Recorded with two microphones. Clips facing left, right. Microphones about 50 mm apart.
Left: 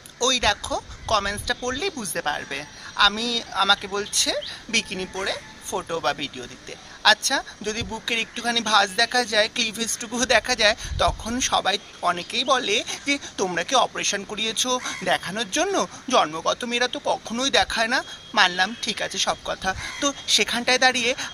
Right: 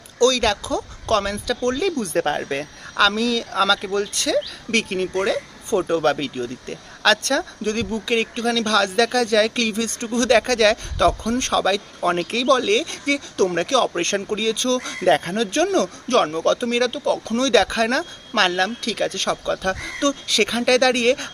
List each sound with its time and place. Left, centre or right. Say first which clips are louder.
0.3 s speech: right 1 dB; centre
0.6 s a woman's voice: right 3 dB; centre
1.2 s speech: right 4 dB; centre
9.7 s speech: right 6 dB; right
10.2 s speech: right 4 dB; centre
13.9 s speech: right 5 dB; right
14.3 s speech: right 5 dB; centre
16.4 s speech: right 5 dB; centre
17.3 s speech: right 6 dB; centre